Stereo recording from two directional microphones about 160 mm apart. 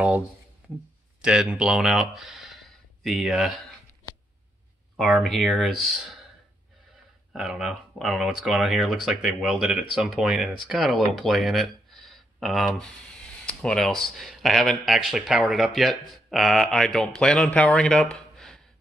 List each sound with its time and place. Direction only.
1.2 s speech: 5° right (ahead or behind)
4.9 s speech: centre (ahead or behind)
7.3 s speech: centre (ahead or behind)
18.1 s a sound: 5° left (ahead or behind)